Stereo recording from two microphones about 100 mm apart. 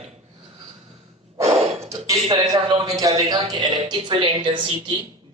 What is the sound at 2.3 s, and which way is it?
A man's voice, 40° right (ahead or behind).